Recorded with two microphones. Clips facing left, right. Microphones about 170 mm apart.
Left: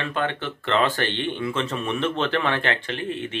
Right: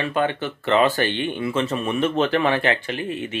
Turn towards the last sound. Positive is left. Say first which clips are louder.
# right 2 dB
turn(degrees=-5)  # may be behind; listen again after turning